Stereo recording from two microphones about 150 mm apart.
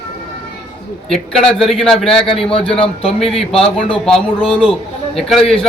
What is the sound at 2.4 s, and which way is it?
Speech, 40° left (ahead or behind).